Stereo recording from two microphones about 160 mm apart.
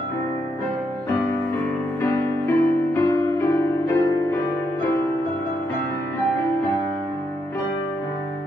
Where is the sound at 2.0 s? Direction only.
15° left (ahead or behind).